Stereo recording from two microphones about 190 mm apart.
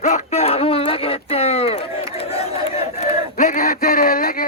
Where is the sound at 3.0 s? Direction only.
40° left (ahead or behind).